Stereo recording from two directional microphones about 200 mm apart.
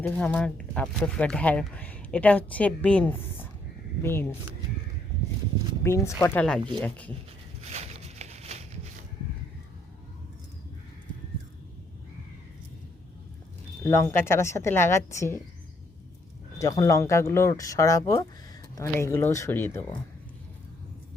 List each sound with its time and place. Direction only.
0.0 s speech: 5° left (ahead or behind)
5.8 s speech: 15° left (ahead or behind)
7.6 s a sound: 35° right (ahead or behind)
13.8 s speech: 15° left (ahead or behind)
16.6 s speech: 15° left (ahead or behind)